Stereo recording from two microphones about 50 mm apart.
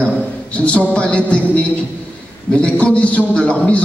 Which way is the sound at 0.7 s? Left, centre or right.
Left.